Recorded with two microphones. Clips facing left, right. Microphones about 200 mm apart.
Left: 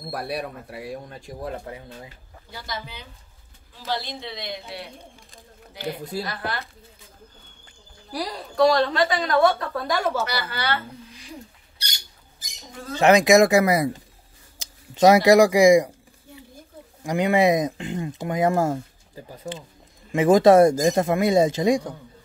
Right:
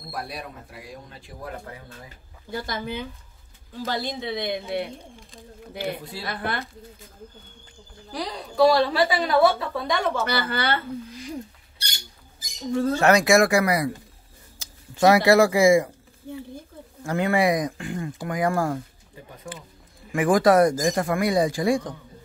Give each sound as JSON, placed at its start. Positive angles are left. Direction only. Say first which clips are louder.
{"t": 0.1, "sound": "speech", "louder": "left 5 dB", "side_deg": 65}
{"t": 1.7, "sound": "speech", "louder": "left 4 dB", "side_deg": 20}
{"t": 2.5, "sound": "a woman's voice", "louder": "right 6 dB", "side_deg": -50}
{"t": 6.2, "sound": "speech", "louder": "right 1 dB", "side_deg": -55}
{"t": 8.1, "sound": "a woman's voice", "louder": "left 1 dB", "side_deg": 5}
{"t": 10.3, "sound": "speech", "louder": "right 2 dB", "side_deg": -55}
{"t": 12.9, "sound": "speech", "louder": "left 4 dB", "side_deg": 20}
{"t": 17.0, "sound": "speech", "louder": "left 2 dB", "side_deg": 15}